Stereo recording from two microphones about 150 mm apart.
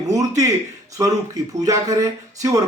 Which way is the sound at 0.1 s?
25° right (ahead or behind).